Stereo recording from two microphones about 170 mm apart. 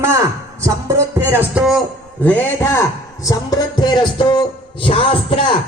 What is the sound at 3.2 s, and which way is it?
Speech, 25° left (ahead or behind).